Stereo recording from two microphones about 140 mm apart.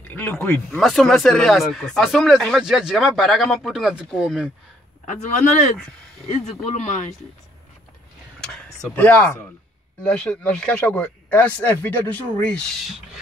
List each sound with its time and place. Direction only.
0.1 s speech: 15° left (ahead or behind)
6.3 s speech: 55° left (ahead or behind)
8.8 s speech: 10° left (ahead or behind)